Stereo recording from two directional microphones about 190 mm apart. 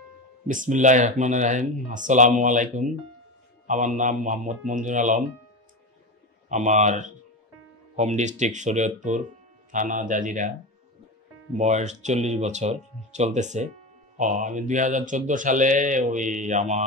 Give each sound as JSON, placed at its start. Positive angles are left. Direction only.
{"t": 0.5, "sound": "speech", "side_deg": -40}
{"t": 6.5, "sound": "speech", "side_deg": -40}
{"t": 11.5, "sound": "speech", "side_deg": -40}